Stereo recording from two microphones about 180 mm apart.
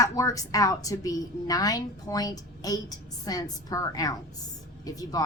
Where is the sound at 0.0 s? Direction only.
20° left (ahead or behind).